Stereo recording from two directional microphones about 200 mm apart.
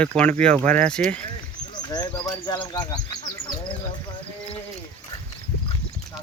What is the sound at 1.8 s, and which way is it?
Speech, 20° left (ahead or behind).